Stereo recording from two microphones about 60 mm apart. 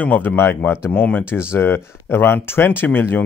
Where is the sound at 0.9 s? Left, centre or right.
Left.